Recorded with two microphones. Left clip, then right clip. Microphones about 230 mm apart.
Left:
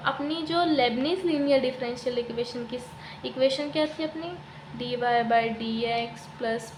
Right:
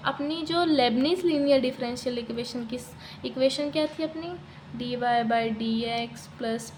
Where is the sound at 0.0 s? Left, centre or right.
Centre.